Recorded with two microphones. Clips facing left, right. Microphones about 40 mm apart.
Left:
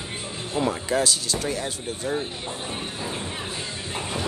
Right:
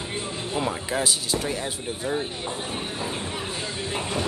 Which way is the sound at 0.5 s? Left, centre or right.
Centre.